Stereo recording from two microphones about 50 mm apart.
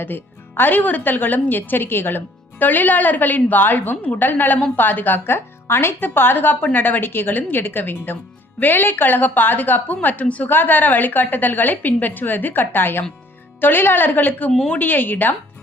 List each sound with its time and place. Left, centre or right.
0.0 s speech: left
10.5 s speech: left